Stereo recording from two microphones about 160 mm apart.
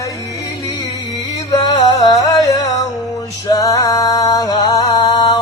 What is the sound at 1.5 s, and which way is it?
Music, 25° left (ahead or behind).